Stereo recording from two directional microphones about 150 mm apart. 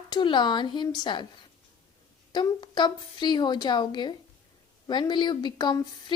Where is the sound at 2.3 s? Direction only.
30° left (ahead or behind).